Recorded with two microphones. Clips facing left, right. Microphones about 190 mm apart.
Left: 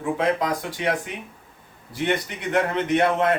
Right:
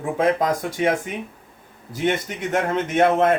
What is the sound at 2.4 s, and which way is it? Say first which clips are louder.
Speech: right 1 dB; 45° right (ahead or behind).